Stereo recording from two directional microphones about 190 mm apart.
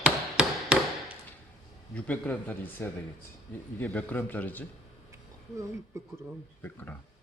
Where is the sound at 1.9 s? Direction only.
10° left (ahead or behind).